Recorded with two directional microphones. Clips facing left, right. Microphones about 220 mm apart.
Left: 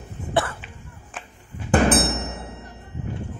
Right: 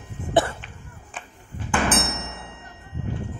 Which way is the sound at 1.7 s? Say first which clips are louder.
Left 6 dB; 40° left (ahead or behind).